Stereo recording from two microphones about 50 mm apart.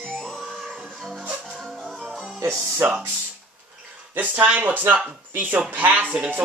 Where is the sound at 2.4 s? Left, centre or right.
Right.